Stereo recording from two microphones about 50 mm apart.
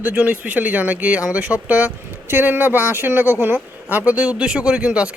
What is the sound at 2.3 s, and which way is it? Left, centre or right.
Speech, right.